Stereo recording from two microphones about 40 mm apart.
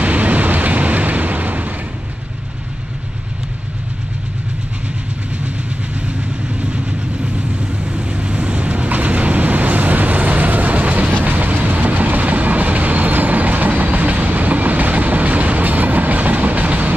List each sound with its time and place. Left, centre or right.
0.0 s vehicle: right
6.6 s vehicle: right
11.1 s train: right